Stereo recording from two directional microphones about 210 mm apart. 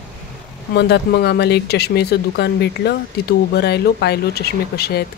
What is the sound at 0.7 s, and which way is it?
Speech, 50° left (ahead or behind).